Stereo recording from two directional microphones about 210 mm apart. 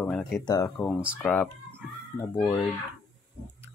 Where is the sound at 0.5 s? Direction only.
15° left (ahead or behind).